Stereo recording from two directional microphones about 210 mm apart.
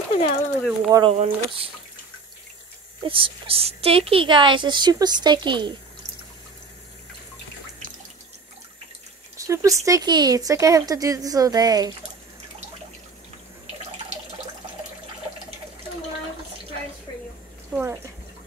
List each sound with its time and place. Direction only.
0.6 s speech: centre (ahead or behind)
0.9 s a woman's voice: 25° right (ahead or behind)
3.0 s a woman's voice: 25° right (ahead or behind)
9.4 s speech: 15° right (ahead or behind)
17.7 s bathtub: 10° right (ahead or behind)